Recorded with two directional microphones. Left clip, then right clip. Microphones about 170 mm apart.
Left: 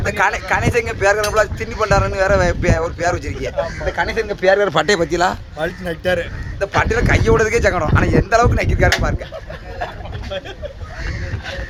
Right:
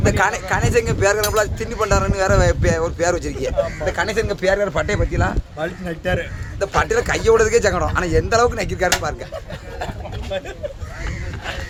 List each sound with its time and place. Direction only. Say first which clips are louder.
0.0 s speech: left 1 dB; centre (ahead or behind)
4.6 s speech: left 5 dB; 70° left (ahead or behind)
5.5 s speech: left 3 dB; 25° left (ahead or behind)
6.6 s speech: left 1 dB; 5° right (ahead or behind)